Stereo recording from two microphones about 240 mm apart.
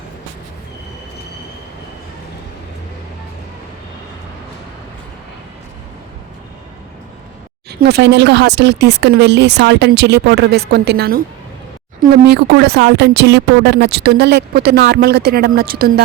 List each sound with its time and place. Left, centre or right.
7.7 s speech: right